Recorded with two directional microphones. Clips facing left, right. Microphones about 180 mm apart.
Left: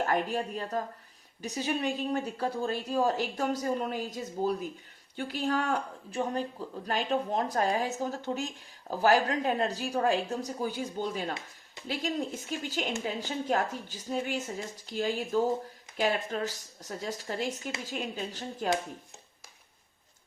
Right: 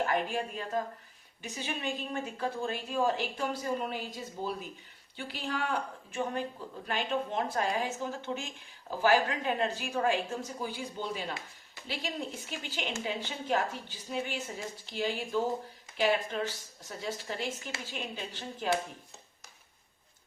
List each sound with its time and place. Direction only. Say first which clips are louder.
0.0 s a woman's voice: left 2 dB; 40° left (ahead or behind)